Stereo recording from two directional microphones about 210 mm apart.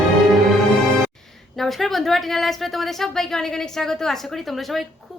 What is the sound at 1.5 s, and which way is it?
A woman's voice, centre (ahead or behind).